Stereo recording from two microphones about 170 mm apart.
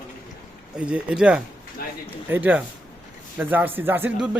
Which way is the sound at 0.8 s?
5° right (ahead or behind).